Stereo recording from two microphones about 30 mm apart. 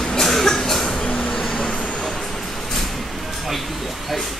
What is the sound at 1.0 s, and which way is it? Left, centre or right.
Vehicle, left.